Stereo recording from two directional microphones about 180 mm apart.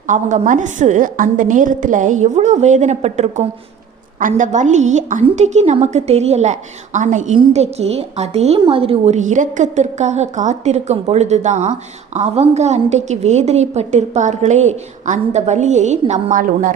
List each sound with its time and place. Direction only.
0.1 s a woman's voice: 45° right (ahead or behind)